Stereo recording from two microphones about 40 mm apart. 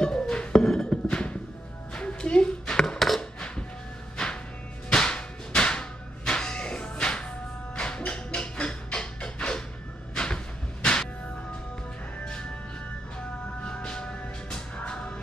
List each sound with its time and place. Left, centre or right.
0.0 s music: left
1.0 s music: left
2.6 s dishes: left
3.2 s a sound: left
4.8 s whip: left
8.4 s music: left
10.1 s a sound: left
13.8 s music: left